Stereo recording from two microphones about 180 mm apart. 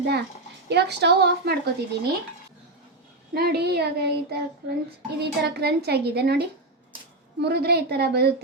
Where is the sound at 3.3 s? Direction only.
65° right (ahead or behind).